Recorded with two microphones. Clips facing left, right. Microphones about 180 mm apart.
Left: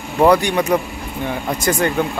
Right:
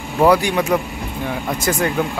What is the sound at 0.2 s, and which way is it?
Speech, 5° right (ahead or behind).